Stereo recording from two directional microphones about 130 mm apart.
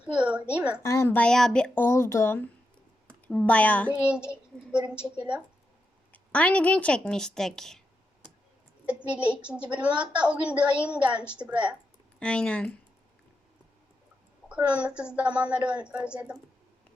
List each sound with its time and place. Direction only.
0.0 s a sound: 10° right (ahead or behind)
0.5 s a woman's voice: 10° right (ahead or behind)
0.8 s a woman's voice: 25° left (ahead or behind)
1.2 s a woman's voice: 5° left (ahead or behind)
4.3 s a woman's voice: 10° right (ahead or behind)
6.3 s a woman's voice: 10° left (ahead or behind)
9.1 s a woman's voice: 10° right (ahead or behind)
12.2 s a woman's voice: 10° left (ahead or behind)
14.5 s a woman's voice: 10° right (ahead or behind)